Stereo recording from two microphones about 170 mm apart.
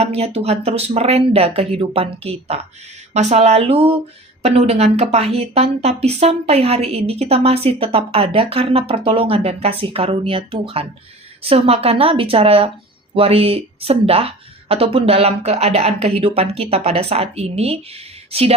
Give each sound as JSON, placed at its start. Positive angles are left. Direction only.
{"t": 0.0, "sound": "speech", "side_deg": -35}